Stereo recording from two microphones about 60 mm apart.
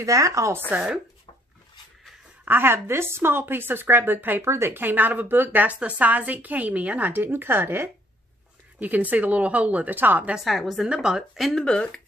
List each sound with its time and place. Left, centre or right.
0.0 s a woman's voice: right
0.7 s a woman's voice: right
2.4 s a woman's voice: right
10.3 s a woman's voice: centre
10.9 s speech: centre
11.5 s speech: centre